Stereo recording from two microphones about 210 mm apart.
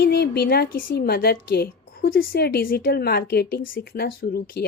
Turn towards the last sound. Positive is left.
turn(degrees=45)  # may be behind; listen again after turning